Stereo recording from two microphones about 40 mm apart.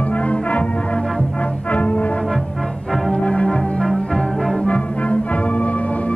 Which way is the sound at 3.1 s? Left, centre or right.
Left.